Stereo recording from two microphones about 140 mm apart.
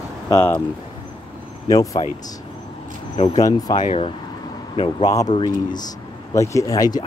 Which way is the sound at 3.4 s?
25° left (ahead or behind).